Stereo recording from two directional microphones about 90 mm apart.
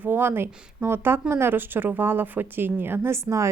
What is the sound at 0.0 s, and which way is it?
A woman's voice, 25° right (ahead or behind).